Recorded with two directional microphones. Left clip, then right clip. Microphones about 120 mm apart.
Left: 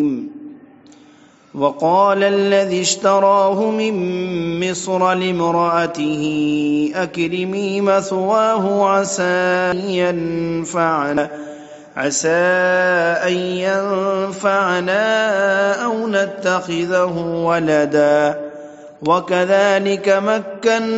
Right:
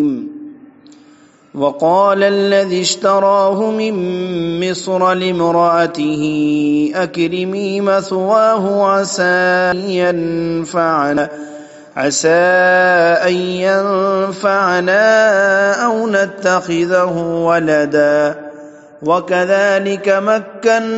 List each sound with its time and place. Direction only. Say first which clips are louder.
1.6 s mantra: right 2 dB; 20° right (ahead or behind)
3.9 s mantra: right 2 dB; 5° right (ahead or behind)
4.6 s mantra: right 2 dB; 20° right (ahead or behind)
10.2 s mantra: right 3 dB; 10° right (ahead or behind); by 17.1 s 30° right (ahead or behind)
17.1 s mantra: right 4 dB; 10° right (ahead or behind)